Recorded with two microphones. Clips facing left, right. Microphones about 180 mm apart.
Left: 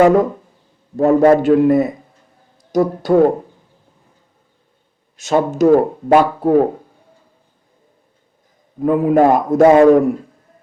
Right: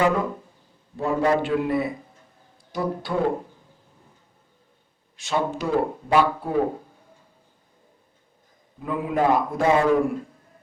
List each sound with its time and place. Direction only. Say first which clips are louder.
0.0 s speech: left 10 dB; 45° left (ahead or behind)
5.1 s speech: left 9 dB; 45° left (ahead or behind)
8.8 s speech: left 11 dB; 45° left (ahead or behind)